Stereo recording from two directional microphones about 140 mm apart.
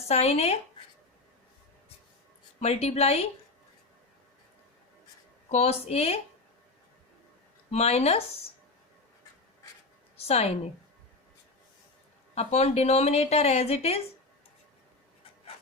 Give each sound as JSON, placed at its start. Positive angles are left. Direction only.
{"t": 0.1, "sound": "a woman's voice", "side_deg": 50}
{"t": 2.6, "sound": "a woman's voice", "side_deg": 50}
{"t": 5.5, "sound": "a woman's voice", "side_deg": 50}
{"t": 7.7, "sound": "a woman's voice", "side_deg": 50}
{"t": 10.2, "sound": "a woman's voice", "side_deg": 50}
{"t": 12.3, "sound": "a woman's voice", "side_deg": 50}